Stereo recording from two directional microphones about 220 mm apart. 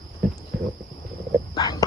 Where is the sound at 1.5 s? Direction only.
20° left (ahead or behind).